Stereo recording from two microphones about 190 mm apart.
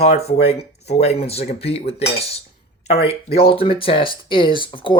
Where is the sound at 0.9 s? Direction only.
35° left (ahead or behind).